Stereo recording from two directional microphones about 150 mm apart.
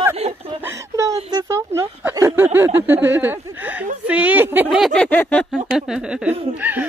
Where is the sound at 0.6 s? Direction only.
20° right (ahead or behind).